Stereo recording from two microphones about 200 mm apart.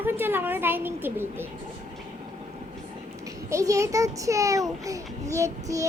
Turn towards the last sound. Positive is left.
turn(degrees=-15)  # may be behind; listen again after turning